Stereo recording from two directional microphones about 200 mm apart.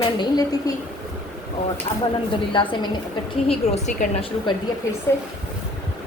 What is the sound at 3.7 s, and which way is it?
Speech, 35° left (ahead or behind).